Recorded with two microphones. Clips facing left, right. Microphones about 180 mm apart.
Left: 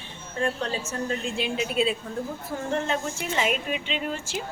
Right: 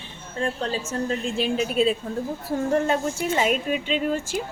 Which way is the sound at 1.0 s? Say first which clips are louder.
Right 4 dB; 40° right (ahead or behind).